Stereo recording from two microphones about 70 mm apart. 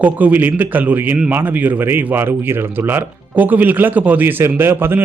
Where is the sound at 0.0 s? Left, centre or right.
Right.